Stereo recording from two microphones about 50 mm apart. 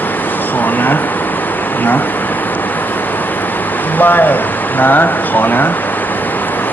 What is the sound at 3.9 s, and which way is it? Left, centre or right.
Speech, left.